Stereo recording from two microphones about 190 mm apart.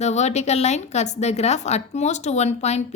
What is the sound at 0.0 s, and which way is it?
A woman's voice, 35° left (ahead or behind).